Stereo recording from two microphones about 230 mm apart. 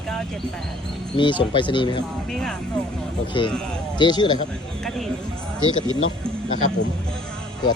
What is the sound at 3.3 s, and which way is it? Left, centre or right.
Speech, left.